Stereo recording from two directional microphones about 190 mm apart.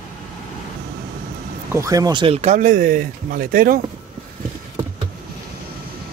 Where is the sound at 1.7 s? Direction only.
15° right (ahead or behind); by 3.8 s 50° right (ahead or behind).